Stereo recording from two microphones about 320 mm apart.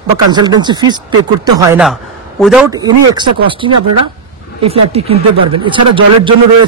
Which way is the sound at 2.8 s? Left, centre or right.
Centre.